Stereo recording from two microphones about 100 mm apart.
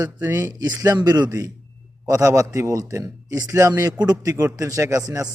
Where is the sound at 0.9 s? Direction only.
40° right (ahead or behind).